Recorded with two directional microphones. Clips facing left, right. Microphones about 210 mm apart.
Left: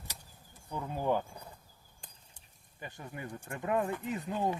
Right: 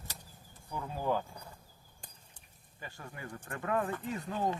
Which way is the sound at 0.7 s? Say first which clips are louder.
Left 2 dB; 20° left (ahead or behind).